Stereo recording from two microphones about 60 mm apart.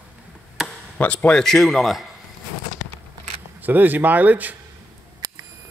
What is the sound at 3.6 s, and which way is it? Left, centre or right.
Speech, right.